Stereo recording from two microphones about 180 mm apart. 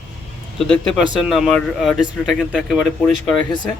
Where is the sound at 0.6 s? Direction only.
5° left (ahead or behind).